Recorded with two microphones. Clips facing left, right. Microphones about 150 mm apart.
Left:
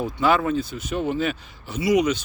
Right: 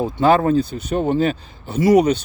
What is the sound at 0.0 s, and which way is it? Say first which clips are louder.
Speech: right 5 dB; 35° right (ahead or behind).